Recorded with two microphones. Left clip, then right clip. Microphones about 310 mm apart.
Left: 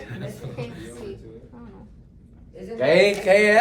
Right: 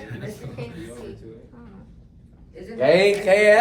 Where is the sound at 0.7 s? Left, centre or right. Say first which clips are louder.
Right 1 dB; centre.